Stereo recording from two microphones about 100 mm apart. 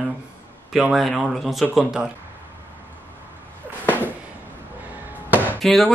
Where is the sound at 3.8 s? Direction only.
20° left (ahead or behind).